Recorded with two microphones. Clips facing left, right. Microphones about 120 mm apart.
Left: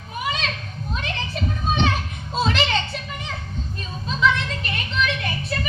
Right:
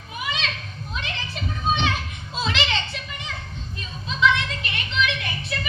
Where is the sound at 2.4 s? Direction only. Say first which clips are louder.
Left 4 dB; 45° left (ahead or behind).